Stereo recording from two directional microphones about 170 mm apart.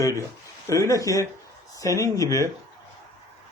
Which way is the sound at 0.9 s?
20° left (ahead or behind).